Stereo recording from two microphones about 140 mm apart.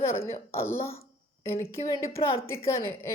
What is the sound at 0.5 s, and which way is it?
A woman's voice, 15° left (ahead or behind).